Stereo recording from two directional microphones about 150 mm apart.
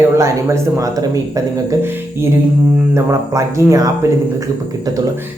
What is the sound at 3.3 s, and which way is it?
Speech, 20° right (ahead or behind).